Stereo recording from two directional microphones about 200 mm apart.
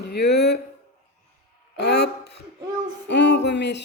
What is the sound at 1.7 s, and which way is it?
Speech, 55° left (ahead or behind).